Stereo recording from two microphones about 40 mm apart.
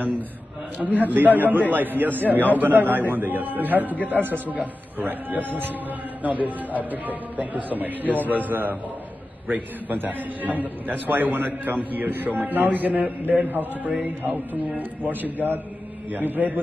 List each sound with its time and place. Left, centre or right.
0.8 s a man's voice: centre
1.1 s a man's voice: right
11.1 s a man's voice: right